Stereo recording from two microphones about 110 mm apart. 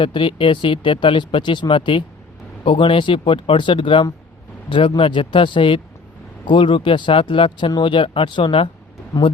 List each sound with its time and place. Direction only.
0.0 s speech: 50° left (ahead or behind)